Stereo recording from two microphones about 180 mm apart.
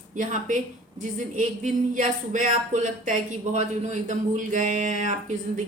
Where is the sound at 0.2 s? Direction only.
45° right (ahead or behind).